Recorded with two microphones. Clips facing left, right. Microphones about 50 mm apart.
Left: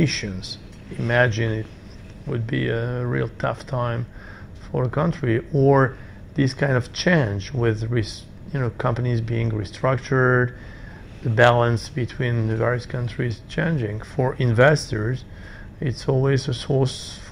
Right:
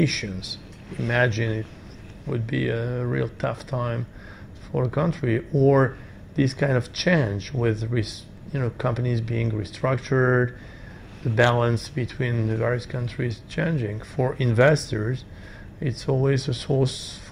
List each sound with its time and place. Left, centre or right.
0.0 s speech: left
15.0 s speech: left
15.8 s speech: left